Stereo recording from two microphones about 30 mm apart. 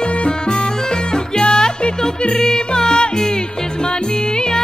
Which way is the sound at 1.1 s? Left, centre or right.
Left.